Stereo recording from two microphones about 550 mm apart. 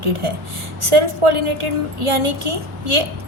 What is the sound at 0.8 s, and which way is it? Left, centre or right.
A woman's voice, right.